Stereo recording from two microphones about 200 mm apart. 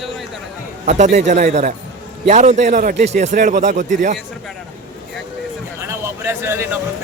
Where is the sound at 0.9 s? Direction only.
35° right (ahead or behind).